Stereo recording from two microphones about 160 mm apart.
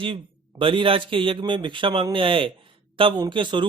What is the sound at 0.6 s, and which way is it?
A man's voice, 35° right (ahead or behind).